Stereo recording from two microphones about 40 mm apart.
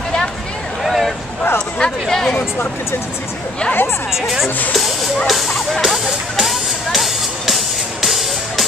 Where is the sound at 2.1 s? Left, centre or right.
Centre.